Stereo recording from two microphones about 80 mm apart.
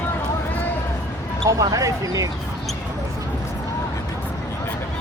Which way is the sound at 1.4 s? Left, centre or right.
Right.